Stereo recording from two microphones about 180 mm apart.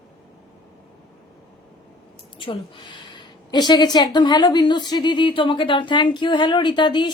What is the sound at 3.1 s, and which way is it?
A woman's voice, 25° left (ahead or behind).